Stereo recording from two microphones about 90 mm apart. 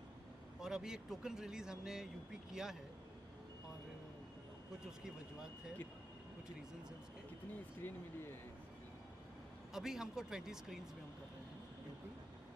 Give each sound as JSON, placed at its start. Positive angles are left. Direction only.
{"t": 0.6, "sound": "speech", "side_deg": -5}
{"t": 7.8, "sound": "speech", "side_deg": 20}
{"t": 9.8, "sound": "speech", "side_deg": -5}